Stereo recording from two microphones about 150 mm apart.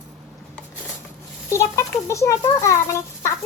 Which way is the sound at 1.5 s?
20° left (ahead or behind).